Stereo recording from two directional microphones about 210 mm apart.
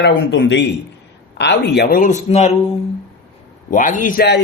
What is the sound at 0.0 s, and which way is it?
Speech, 60° left (ahead or behind).